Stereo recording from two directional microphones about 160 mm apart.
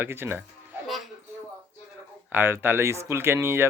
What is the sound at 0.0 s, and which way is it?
Speech, 15° right (ahead or behind).